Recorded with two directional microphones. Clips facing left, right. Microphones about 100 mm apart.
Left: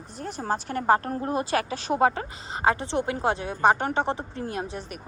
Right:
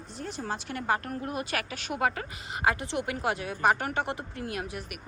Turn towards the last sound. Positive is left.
turn(degrees=30)  # may be behind; listen again after turning